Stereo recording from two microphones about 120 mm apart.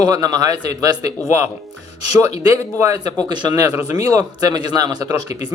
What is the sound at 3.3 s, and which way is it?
A man's voice, 35° right (ahead or behind).